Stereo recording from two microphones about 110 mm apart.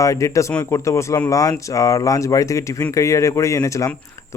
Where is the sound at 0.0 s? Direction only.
30° left (ahead or behind).